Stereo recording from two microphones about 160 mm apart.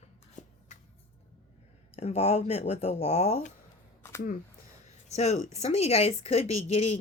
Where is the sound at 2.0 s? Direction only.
40° left (ahead or behind).